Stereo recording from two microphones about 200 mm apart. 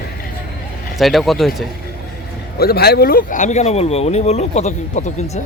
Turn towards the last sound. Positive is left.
turn(degrees=35)  # may be behind; listen again after turning